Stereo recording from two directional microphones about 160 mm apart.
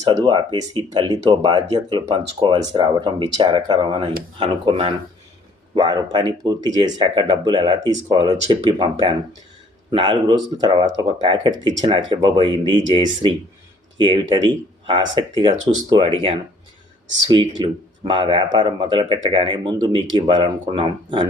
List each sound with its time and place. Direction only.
0.0 s speech: 30° right (ahead or behind)